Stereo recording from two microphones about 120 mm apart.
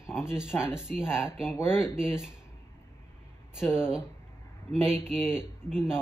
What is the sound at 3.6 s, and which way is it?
Speech, 5° right (ahead or behind).